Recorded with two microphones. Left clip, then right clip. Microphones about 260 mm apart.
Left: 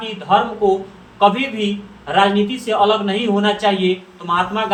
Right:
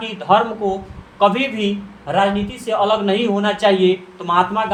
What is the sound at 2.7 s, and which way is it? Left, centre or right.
Speech, right.